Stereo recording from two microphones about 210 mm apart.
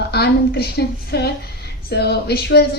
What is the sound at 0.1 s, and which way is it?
A woman's voice, 50° left (ahead or behind).